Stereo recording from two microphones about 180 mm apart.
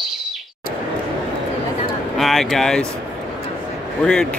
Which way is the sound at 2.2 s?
Centre (ahead or behind).